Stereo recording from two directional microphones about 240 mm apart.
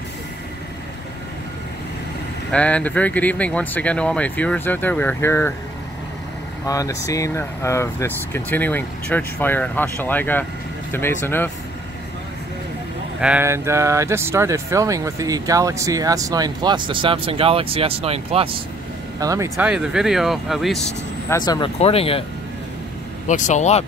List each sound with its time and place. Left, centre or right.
2.5 s speech: centre
6.6 s speech: centre
13.2 s speech: centre
21.4 s speech: centre
23.2 s speech: left